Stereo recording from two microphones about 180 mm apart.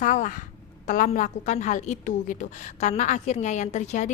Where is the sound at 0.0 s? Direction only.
45° left (ahead or behind).